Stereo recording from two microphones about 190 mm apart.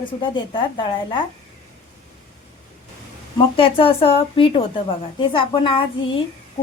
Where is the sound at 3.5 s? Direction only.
30° left (ahead or behind).